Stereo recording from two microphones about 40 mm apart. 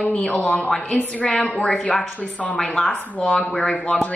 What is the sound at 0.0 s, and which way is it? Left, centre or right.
A woman's voice, left.